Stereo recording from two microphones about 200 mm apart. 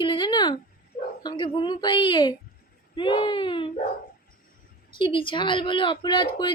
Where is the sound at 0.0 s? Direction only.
25° left (ahead or behind).